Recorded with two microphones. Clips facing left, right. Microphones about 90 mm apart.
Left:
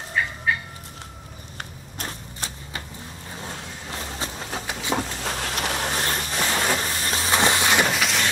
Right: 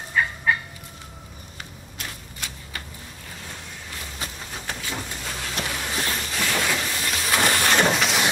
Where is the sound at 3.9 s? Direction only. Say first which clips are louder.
Left 4 dB; 35° left (ahead or behind).